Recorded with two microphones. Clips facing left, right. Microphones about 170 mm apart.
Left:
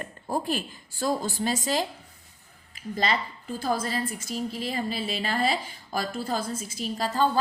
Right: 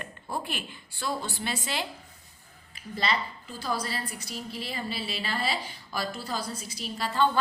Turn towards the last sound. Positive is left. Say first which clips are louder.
# left 2 dB
turn(degrees=40)  # may be behind; listen again after turning